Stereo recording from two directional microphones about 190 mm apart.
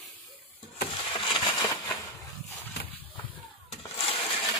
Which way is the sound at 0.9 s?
30° left (ahead or behind).